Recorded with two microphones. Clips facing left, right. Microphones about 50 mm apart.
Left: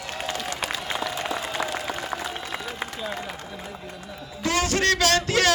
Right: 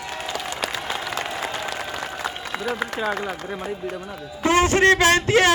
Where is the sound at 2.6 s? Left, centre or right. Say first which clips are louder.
Right 7 dB; right.